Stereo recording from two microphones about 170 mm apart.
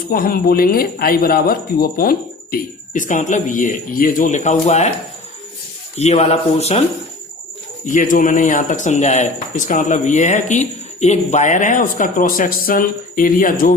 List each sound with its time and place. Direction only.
0.1 s speech: 60° left (ahead or behind); by 4.9 s 40° left (ahead or behind)
6.0 s speech: 40° left (ahead or behind)
7.9 s speech: 50° left (ahead or behind)